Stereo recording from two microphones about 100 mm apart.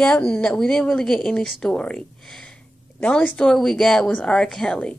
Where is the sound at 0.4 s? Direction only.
10° left (ahead or behind).